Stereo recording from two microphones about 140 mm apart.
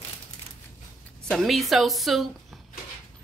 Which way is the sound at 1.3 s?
Centre (ahead or behind).